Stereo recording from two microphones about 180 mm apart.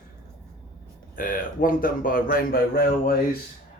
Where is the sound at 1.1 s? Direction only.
50° left (ahead or behind).